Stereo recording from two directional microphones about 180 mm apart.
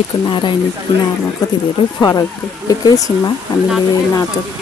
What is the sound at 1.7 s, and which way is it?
Speech, 25° left (ahead or behind).